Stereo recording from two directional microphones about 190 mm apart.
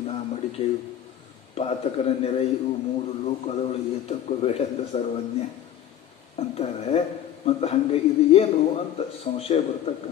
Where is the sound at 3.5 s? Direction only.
35° left (ahead or behind).